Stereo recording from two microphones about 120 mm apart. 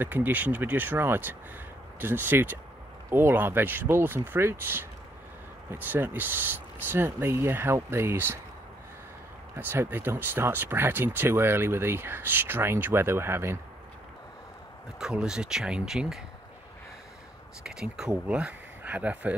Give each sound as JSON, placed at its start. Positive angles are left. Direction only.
{"t": 0.0, "sound": "speech", "side_deg": -15}
{"t": 9.6, "sound": "speech", "side_deg": -15}
{"t": 15.0, "sound": "speech", "side_deg": -5}
{"t": 17.6, "sound": "speech", "side_deg": -5}